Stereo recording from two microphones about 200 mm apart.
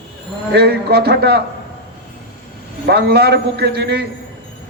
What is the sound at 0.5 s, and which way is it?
Speech, 55° right (ahead or behind).